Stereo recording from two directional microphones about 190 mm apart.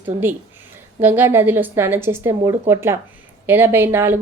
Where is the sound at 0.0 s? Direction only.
10° right (ahead or behind).